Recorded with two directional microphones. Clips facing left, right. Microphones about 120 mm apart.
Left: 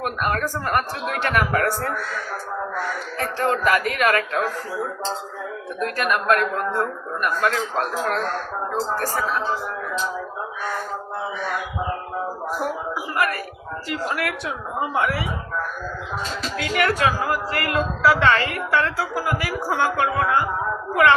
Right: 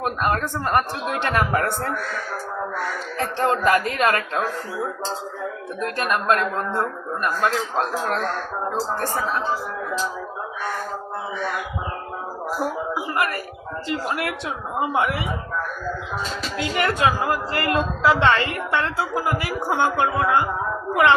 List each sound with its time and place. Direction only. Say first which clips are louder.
0.0 s a woman's voice: right 1 dB; 25° right (ahead or behind)
3.2 s a woman's voice: right 1 dB; 25° right (ahead or behind)
6.0 s a woman's voice: left 1 dB; 30° right (ahead or behind)
12.9 s a woman's voice: even; 30° right (ahead or behind)
16.6 s a woman's voice: left 1 dB; 25° right (ahead or behind)